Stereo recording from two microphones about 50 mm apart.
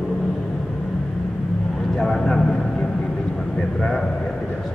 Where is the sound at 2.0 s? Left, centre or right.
Centre.